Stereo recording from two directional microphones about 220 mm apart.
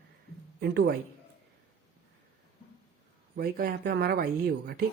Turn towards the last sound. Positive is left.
turn(degrees=-45)  # may be behind; listen again after turning